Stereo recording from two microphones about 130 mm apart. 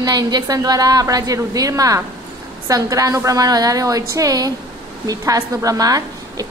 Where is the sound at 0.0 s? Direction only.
30° right (ahead or behind).